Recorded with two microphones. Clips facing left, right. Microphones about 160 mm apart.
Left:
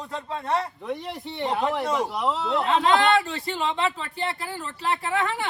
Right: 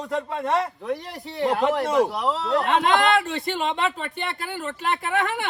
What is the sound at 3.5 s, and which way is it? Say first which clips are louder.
Speech: left 1 dB; 65° right (ahead or behind).